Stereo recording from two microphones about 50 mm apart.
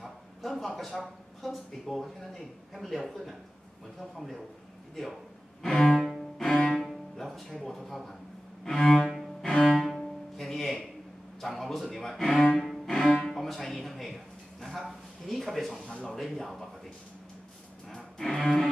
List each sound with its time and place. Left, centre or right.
0.0 s speech: centre
5.6 s cello: centre
5.9 s cello: centre
6.5 s cello: centre
6.9 s speech: centre
9.4 s cello: centre
9.7 s cello: centre
9.9 s music: centre
11.4 s speech: centre
12.5 s cello: centre
12.8 s music: centre
15.7 s speech: centre
16.1 s speech: centre
17.8 s music: centre